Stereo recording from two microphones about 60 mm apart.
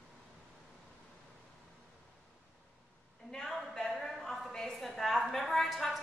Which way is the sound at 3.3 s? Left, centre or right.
Centre.